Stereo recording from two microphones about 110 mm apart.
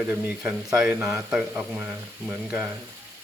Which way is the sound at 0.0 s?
15° right (ahead or behind).